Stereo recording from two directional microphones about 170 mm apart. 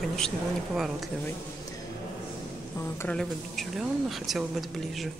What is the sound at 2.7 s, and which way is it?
Speech, 15° left (ahead or behind).